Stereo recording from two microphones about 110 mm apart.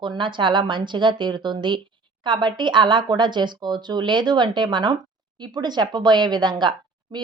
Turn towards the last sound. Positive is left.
turn(degrees=-45)  # may be behind; listen again after turning